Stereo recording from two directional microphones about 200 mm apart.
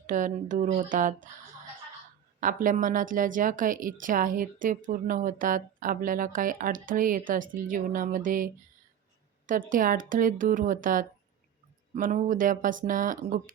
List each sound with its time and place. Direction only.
0.1 s speech: 40° right (ahead or behind)
2.4 s speech: 40° right (ahead or behind)
9.5 s speech: 40° right (ahead or behind)